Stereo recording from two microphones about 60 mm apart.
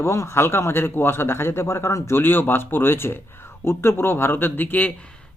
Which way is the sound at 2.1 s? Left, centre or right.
Left.